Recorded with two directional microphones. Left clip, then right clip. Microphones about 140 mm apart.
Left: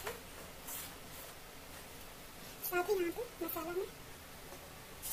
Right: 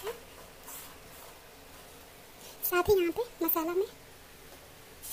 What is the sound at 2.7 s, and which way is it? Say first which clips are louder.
Speech: right 9 dB; 40° right (ahead or behind).